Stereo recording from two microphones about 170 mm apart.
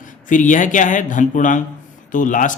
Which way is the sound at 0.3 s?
50° left (ahead or behind).